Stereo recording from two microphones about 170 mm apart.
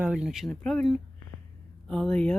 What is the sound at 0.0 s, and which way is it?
Speech, 5° right (ahead or behind).